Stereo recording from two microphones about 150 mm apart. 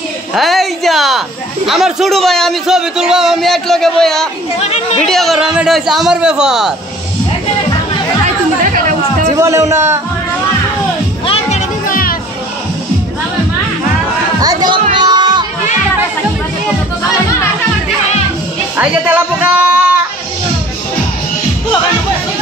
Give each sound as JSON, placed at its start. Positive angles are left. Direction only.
{"t": 0.3, "sound": "a man's voice", "side_deg": 0}
{"t": 4.6, "sound": "speech", "side_deg": 45}
{"t": 5.0, "sound": "a man's voice", "side_deg": 0}
{"t": 8.6, "sound": "chatter", "side_deg": -60}
{"t": 9.4, "sound": "a man's voice", "side_deg": -20}
{"t": 11.5, "sound": "music", "side_deg": 70}
{"t": 14.4, "sound": "music", "side_deg": -25}
{"t": 18.8, "sound": "a sound", "side_deg": -10}